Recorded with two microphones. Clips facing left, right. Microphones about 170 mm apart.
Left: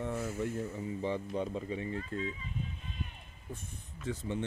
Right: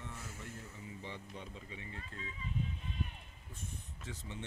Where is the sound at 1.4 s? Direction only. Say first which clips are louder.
Left 14 dB; 45° left (ahead or behind).